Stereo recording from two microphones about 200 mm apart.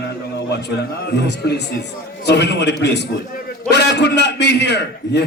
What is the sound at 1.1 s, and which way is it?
A man's voice, 55° left (ahead or behind).